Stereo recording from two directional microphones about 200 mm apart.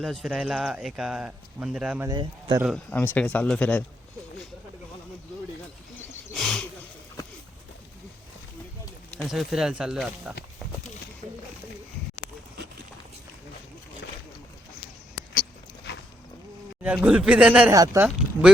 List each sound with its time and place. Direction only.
0.0 s speech: centre (ahead or behind)
2.0 s a man's voice: 20° right (ahead or behind)
2.7 s speech: 10° left (ahead or behind)
6.3 s a sound: centre (ahead or behind)
9.0 s speech: centre (ahead or behind)
15.9 s a sound: 60° left (ahead or behind)
16.8 s speech: 5° right (ahead or behind)